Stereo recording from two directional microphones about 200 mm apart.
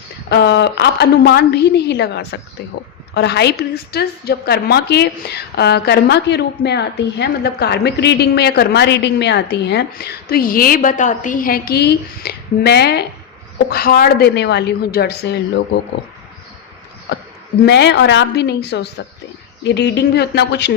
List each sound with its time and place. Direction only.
0.3 s a woman's voice: 55° left (ahead or behind)
17.7 s a woman's voice: 60° left (ahead or behind)